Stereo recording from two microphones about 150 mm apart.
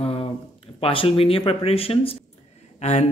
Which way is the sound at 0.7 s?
40° left (ahead or behind).